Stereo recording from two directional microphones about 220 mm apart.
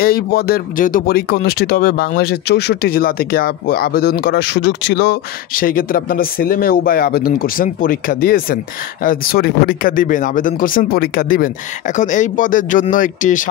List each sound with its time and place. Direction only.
0.0 s speech: 45° left (ahead or behind)